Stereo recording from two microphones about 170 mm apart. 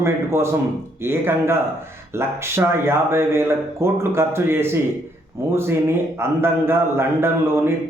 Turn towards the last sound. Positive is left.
turn(degrees=-15)  # may be behind; listen again after turning